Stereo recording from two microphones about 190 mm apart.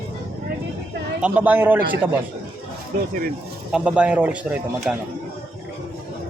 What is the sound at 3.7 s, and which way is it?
Speech, 5° right (ahead or behind).